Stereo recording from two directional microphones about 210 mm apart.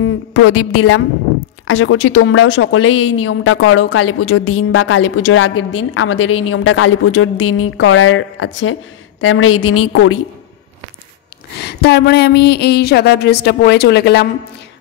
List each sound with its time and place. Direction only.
0.0 s a woman's voice: 75° left (ahead or behind)
9.2 s a woman's voice: 90° left
11.6 s a woman's voice: 50° left (ahead or behind)